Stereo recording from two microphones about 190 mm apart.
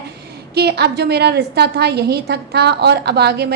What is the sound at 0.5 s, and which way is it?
A woman's voice, 60° right (ahead or behind).